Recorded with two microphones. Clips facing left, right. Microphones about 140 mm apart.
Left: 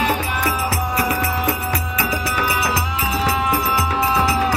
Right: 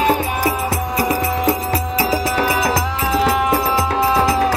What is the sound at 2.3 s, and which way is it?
Music, 50° right (ahead or behind).